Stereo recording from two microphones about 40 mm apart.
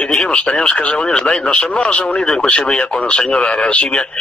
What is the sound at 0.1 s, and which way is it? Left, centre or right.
Speech, left.